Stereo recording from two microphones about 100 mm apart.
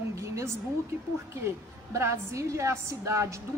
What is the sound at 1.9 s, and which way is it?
A woman's voice, 30° right (ahead or behind).